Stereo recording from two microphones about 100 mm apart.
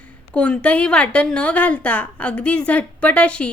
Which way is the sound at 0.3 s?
10° left (ahead or behind).